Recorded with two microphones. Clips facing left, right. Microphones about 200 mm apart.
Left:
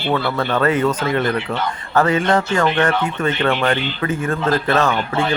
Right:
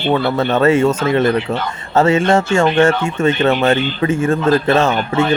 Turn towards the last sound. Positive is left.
turn(degrees=-25)  # may be behind; listen again after turning